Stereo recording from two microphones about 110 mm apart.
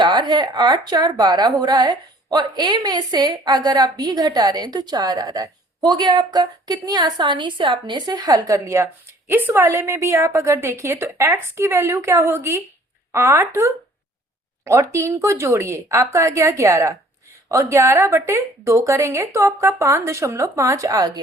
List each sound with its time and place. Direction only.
0.0 s a woman's voice: 40° right (ahead or behind)